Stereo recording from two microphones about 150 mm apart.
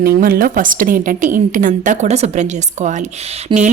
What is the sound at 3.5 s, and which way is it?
Speech, 30° right (ahead or behind).